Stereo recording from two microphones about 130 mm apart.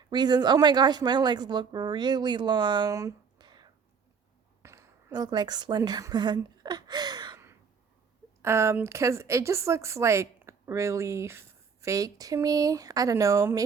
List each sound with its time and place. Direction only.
0.0 s speech: 35° right (ahead or behind)
3.3 s whispering: 35° right (ahead or behind)
4.6 s a woman's voice: 20° right (ahead or behind)
8.4 s a woman's voice: 20° right (ahead or behind)